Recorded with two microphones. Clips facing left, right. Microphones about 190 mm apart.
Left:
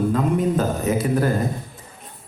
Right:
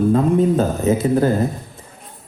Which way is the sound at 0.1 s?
30° right (ahead or behind).